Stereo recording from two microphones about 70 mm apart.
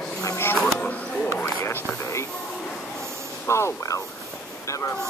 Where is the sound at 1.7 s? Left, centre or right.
Left.